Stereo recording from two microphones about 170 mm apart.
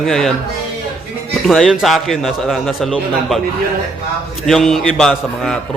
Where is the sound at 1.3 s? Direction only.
Centre (ahead or behind).